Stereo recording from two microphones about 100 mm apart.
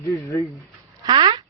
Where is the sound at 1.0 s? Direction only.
50° right (ahead or behind).